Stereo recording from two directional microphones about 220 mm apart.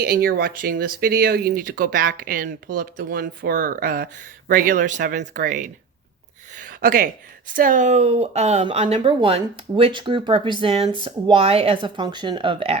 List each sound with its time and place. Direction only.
0.0 s speech: 40° right (ahead or behind); by 12.8 s 25° right (ahead or behind)